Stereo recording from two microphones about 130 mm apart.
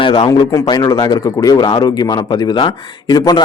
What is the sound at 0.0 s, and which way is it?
A man's voice, 40° left (ahead or behind).